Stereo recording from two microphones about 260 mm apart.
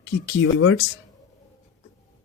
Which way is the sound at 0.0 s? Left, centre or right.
Left.